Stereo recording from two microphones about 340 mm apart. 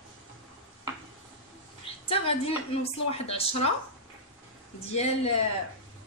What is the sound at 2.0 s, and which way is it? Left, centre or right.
A woman's voice, centre.